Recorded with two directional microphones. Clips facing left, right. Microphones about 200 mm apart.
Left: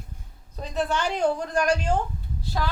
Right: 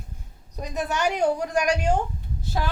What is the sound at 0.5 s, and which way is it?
A woman's voice, 15° right (ahead or behind).